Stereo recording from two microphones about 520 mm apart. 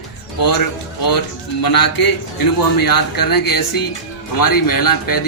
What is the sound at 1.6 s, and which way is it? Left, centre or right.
Speech, left.